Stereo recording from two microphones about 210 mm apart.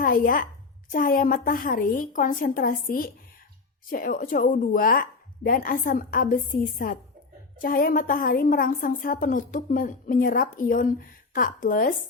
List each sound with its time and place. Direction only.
0.0 s a woman's voice: 40° left (ahead or behind)